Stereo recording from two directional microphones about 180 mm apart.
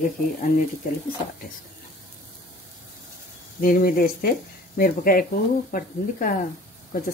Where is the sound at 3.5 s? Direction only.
55° left (ahead or behind).